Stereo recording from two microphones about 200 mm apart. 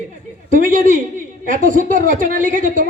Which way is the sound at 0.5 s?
40° right (ahead or behind).